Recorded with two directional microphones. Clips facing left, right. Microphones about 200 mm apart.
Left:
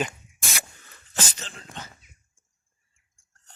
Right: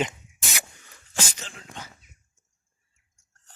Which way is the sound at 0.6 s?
10° right (ahead or behind).